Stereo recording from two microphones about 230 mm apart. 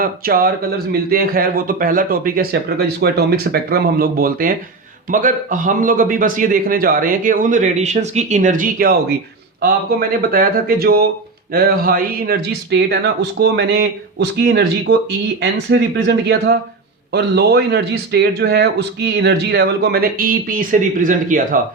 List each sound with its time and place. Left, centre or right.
0.0 s a man's voice: right